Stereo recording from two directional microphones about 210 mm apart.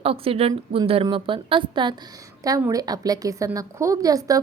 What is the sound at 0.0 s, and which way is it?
A woman's voice, 25° right (ahead or behind).